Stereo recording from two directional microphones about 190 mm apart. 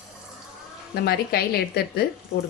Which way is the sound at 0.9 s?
55° left (ahead or behind).